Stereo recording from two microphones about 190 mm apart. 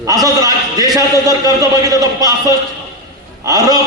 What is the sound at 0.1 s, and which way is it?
A man's voice, 20° right (ahead or behind).